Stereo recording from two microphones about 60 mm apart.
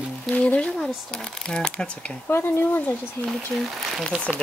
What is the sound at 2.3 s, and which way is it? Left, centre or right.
Speech, left.